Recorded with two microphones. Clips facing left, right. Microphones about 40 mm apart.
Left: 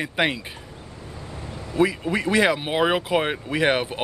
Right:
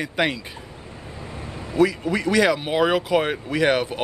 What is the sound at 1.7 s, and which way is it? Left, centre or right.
A man's voice, left.